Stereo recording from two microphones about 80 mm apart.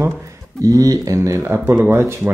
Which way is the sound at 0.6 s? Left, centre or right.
Right.